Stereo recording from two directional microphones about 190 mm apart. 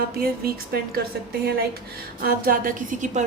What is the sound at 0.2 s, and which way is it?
Speech, 55° right (ahead or behind).